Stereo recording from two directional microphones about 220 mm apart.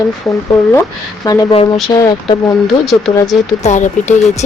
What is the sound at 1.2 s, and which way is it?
Speech, 15° left (ahead or behind).